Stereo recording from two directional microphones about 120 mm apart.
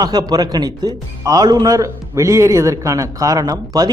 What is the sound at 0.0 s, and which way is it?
A man's voice, 35° right (ahead or behind).